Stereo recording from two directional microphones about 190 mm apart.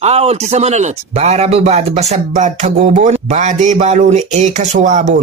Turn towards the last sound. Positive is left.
turn(degrees=-40)  # may be behind; listen again after turning